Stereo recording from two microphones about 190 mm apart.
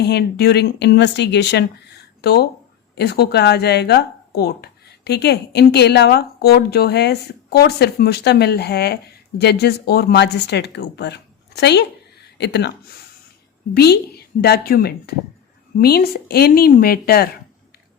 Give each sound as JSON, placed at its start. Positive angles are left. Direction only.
{"t": 0.0, "sound": "a woman's voice", "side_deg": 60}